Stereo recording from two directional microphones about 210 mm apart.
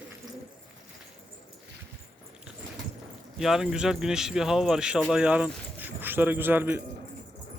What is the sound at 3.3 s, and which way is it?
A man's voice, centre (ahead or behind).